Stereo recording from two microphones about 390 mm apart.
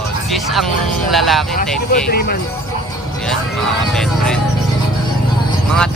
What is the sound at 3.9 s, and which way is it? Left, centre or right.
Speech, centre.